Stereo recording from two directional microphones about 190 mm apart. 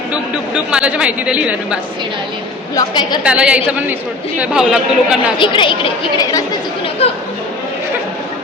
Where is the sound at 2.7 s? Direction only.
20° left (ahead or behind).